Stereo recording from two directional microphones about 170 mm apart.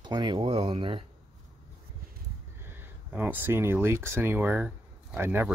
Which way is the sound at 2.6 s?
10° right (ahead or behind).